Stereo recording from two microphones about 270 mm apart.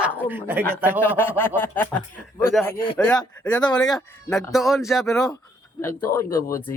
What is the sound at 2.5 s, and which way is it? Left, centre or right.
Speech, centre.